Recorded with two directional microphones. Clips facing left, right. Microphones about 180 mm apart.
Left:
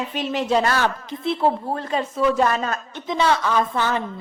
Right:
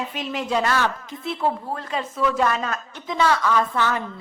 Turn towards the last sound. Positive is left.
turn(degrees=30)  # may be behind; listen again after turning